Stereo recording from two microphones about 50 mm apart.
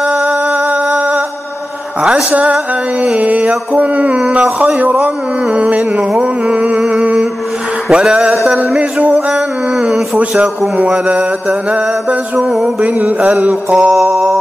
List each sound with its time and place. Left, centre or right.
0.0 s humming: right
0.9 s a sound: right
2.3 s music: right
12.4 s music: centre